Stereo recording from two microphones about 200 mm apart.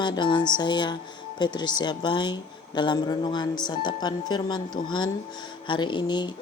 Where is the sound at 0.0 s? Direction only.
20° left (ahead or behind).